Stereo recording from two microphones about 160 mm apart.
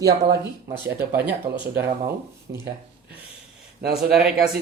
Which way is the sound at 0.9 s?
10° right (ahead or behind).